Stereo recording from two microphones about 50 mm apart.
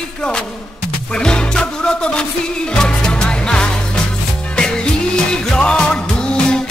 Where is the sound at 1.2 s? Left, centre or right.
Centre.